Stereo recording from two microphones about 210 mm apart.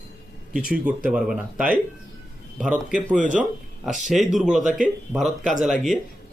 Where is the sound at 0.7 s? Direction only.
5° right (ahead or behind).